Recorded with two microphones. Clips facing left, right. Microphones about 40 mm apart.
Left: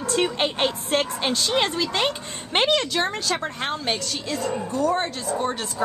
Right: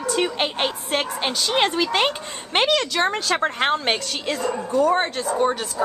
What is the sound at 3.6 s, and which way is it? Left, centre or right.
Speech, right.